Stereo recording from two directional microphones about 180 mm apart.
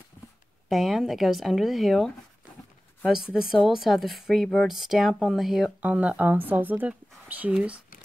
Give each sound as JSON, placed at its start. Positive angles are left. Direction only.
{"t": 0.7, "sound": "speech", "side_deg": 0}
{"t": 3.3, "sound": "speech", "side_deg": 0}